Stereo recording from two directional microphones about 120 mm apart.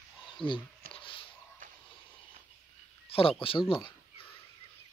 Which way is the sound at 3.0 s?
50° left (ahead or behind).